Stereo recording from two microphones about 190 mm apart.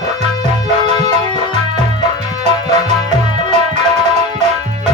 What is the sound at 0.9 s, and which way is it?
Music, 35° right (ahead or behind).